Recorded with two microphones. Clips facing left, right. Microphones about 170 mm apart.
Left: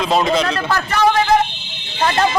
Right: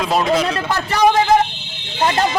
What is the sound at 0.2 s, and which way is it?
Speech, 5° right (ahead or behind).